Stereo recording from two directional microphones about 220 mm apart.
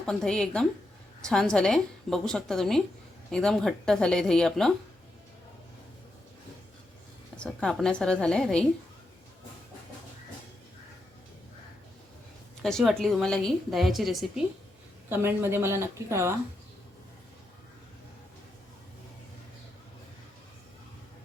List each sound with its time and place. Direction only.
0.0 s a woman's voice: 5° left (ahead or behind)
7.3 s a woman's voice: 5° left (ahead or behind)
12.6 s a woman's voice: centre (ahead or behind)